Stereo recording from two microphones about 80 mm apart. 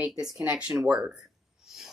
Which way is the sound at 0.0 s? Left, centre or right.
Centre.